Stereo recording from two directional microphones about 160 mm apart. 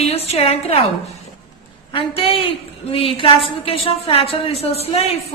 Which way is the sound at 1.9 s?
35° left (ahead or behind).